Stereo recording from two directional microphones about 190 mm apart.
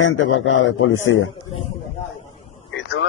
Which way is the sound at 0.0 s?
90° left.